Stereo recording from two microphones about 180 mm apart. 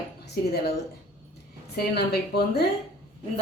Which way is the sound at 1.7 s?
60° left (ahead or behind).